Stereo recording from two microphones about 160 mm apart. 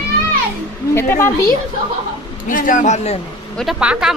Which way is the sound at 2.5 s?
55° left (ahead or behind).